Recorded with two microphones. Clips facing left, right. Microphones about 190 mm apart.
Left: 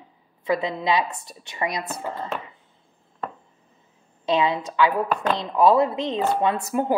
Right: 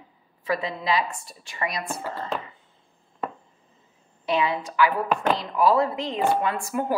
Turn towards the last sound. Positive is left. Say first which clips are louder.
# left 3 dB
turn(degrees=25)  # may be behind; listen again after turning